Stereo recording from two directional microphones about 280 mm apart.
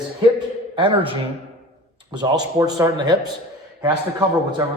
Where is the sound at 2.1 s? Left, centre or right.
Centre.